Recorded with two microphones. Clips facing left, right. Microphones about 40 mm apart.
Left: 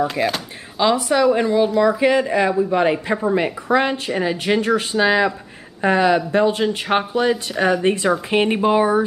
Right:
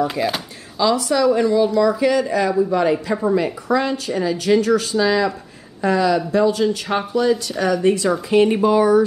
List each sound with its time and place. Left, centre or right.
0.0 s speech: centre
0.7 s a woman's voice: left